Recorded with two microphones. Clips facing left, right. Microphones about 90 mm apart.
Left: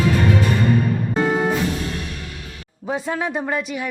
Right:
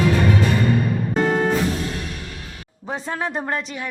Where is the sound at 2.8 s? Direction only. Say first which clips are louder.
Left 3 dB; 5° left (ahead or behind).